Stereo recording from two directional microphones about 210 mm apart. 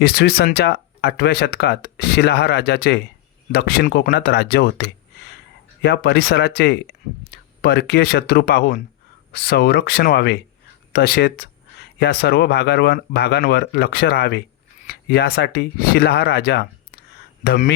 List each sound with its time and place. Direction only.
0.0 s speech: 50° left (ahead or behind)